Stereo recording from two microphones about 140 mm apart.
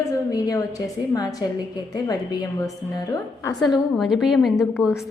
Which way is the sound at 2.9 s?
25° left (ahead or behind).